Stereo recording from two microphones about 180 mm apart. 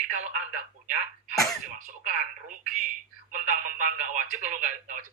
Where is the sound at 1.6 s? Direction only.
50° right (ahead or behind).